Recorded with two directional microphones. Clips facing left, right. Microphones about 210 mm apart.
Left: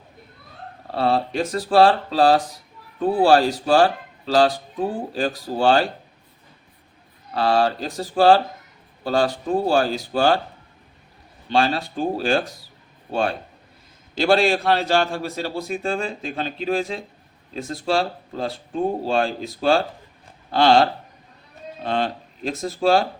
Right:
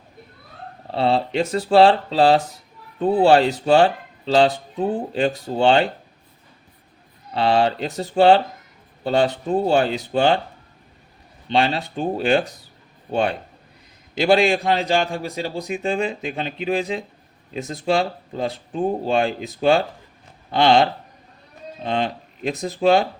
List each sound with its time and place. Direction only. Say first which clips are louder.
0.9 s speech: right 1 dB; 25° right (ahead or behind)
7.3 s speech: right 1 dB; 25° right (ahead or behind)
11.5 s speech: even; 20° right (ahead or behind)
14.2 s a man's voice: right 1 dB; 15° right (ahead or behind)
21.8 s a man's voice: even; 15° right (ahead or behind)